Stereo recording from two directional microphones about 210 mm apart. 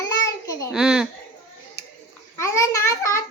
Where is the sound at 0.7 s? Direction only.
5° right (ahead or behind).